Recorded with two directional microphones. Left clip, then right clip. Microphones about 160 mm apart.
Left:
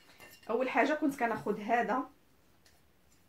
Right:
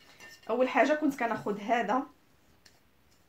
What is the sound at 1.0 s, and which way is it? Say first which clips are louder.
Speech: right 2 dB; 35° right (ahead or behind).